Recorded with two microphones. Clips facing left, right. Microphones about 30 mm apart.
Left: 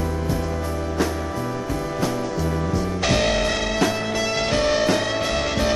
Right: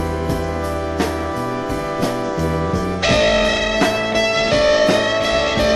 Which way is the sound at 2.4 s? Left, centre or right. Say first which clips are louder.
Right 4 dB; right.